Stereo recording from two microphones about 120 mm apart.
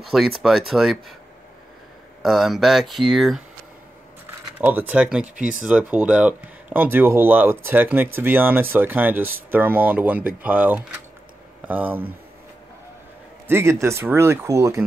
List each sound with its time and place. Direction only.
0.0 s speech: centre (ahead or behind)
2.2 s speech: centre (ahead or behind)
4.6 s speech: 15° right (ahead or behind)
13.5 s speech: 20° right (ahead or behind)